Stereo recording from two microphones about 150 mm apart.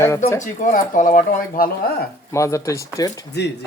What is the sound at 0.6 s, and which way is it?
Speech, 60° left (ahead or behind).